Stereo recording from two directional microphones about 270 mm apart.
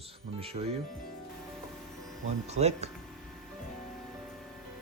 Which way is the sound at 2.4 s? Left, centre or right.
Right.